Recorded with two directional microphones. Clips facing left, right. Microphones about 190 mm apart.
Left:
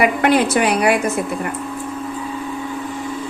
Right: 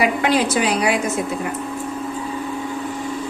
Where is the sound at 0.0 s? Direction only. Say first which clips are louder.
Left 3 dB; 55° left (ahead or behind).